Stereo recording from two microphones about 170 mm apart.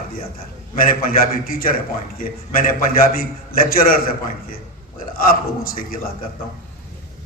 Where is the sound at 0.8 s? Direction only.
55° left (ahead or behind).